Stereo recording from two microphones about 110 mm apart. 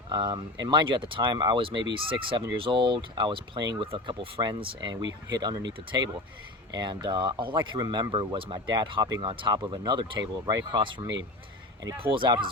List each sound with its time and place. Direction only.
0.1 s speech: 45° right (ahead or behind)
9.3 s speech: 50° right (ahead or behind)